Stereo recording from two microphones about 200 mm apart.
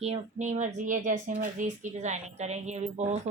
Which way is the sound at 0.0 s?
35° right (ahead or behind).